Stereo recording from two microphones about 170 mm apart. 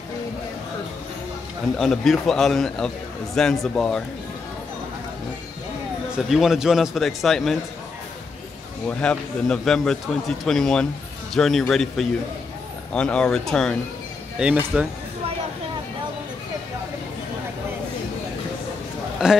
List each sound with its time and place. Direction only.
1.8 s a man's voice: centre (ahead or behind)
6.1 s a man's voice: centre (ahead or behind)
8.8 s a man's voice: 5° left (ahead or behind)
19.2 s a man's voice: 5° right (ahead or behind)